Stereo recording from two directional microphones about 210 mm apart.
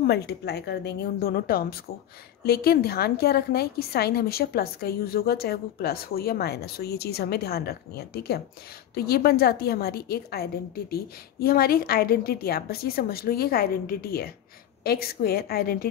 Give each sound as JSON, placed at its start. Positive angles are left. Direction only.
{"t": 0.0, "sound": "a woman's voice", "side_deg": 50}